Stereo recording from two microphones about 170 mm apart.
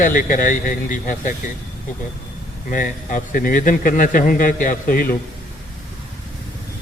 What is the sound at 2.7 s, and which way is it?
A man's voice, 50° left (ahead or behind).